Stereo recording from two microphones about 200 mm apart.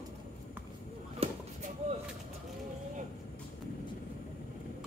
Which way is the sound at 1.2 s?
35° right (ahead or behind).